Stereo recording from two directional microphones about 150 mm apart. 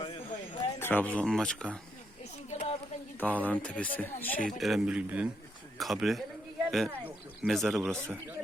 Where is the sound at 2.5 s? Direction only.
50° left (ahead or behind).